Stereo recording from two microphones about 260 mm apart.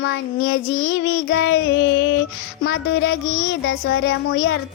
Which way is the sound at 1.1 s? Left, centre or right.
Left.